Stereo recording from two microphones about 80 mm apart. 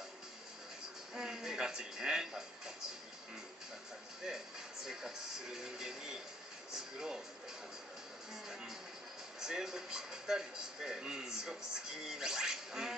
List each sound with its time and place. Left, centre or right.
1.1 s speech: centre
4.2 s speech: centre
6.7 s a sound: centre
8.5 s speech: centre